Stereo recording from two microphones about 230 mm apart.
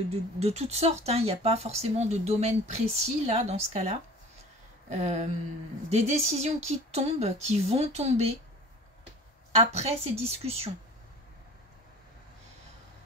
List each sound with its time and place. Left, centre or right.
0.4 s speech: right
9.6 s speech: right